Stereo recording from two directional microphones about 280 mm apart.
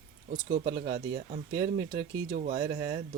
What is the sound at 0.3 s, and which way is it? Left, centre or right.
Speech, right.